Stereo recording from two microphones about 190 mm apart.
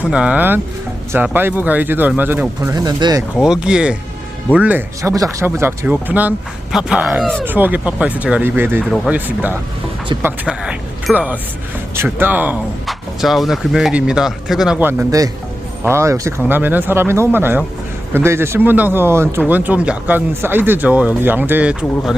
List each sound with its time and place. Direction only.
0.0 s speech: 5° right (ahead or behind)
2.7 s speech: 20° right (ahead or behind)
3.4 s speech: 5° right (ahead or behind)